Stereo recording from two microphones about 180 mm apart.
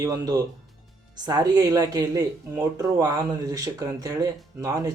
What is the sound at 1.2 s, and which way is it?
Speech, 20° right (ahead or behind).